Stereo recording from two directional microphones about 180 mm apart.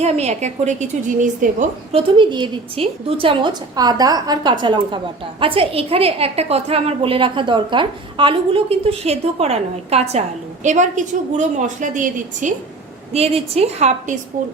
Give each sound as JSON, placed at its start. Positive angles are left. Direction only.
{"t": 0.0, "sound": "a woman's voice", "side_deg": -35}
{"t": 2.0, "sound": "a woman's voice", "side_deg": -25}
{"t": 13.1, "sound": "a woman's voice", "side_deg": -35}